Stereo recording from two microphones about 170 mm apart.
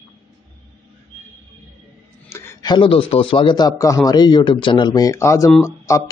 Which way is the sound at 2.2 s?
15° left (ahead or behind).